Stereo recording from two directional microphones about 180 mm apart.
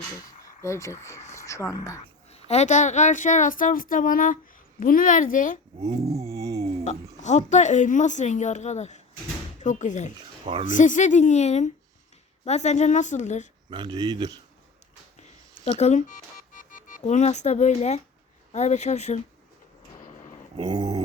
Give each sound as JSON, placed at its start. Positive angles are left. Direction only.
{"t": 0.4, "sound": "speech", "side_deg": 15}
{"t": 1.3, "sound": "a sound", "side_deg": 15}
{"t": 1.7, "sound": "speech", "side_deg": 20}
{"t": 2.3, "sound": "speech", "side_deg": 35}
{"t": 5.9, "sound": "a sound", "side_deg": -35}
{"t": 6.2, "sound": "a sound", "side_deg": -20}
{"t": 7.2, "sound": "a woman's voice", "side_deg": 40}
{"t": 10.4, "sound": "speech", "side_deg": -35}
{"t": 10.7, "sound": "a woman's voice", "side_deg": 45}
{"t": 13.7, "sound": "speech", "side_deg": -25}
{"t": 15.8, "sound": "a woman's voice", "side_deg": 40}
{"t": 20.0, "sound": "a sound", "side_deg": 45}
{"t": 20.6, "sound": "speech", "side_deg": -20}